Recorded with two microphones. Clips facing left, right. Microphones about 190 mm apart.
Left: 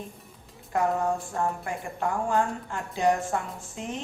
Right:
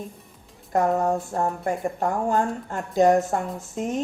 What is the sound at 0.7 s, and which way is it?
A woman's voice, 40° right (ahead or behind).